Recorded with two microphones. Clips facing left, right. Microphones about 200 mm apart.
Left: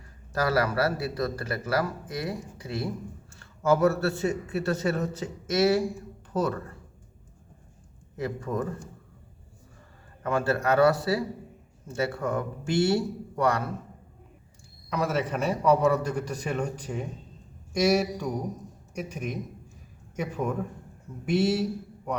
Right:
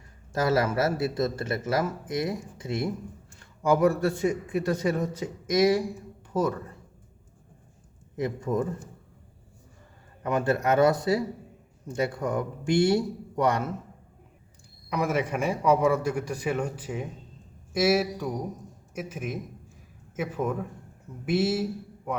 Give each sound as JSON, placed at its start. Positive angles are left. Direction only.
{"t": 0.3, "sound": "a man's voice", "side_deg": -20}
{"t": 8.1, "sound": "speech", "side_deg": -20}
{"t": 10.2, "sound": "speech", "side_deg": -20}
{"t": 14.8, "sound": "a man's voice", "side_deg": -15}